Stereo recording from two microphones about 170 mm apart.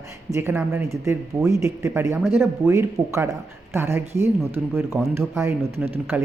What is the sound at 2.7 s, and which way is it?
Speech, 15° right (ahead or behind).